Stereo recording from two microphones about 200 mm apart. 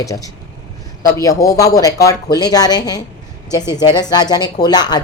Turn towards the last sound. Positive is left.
turn(degrees=20)  # may be behind; listen again after turning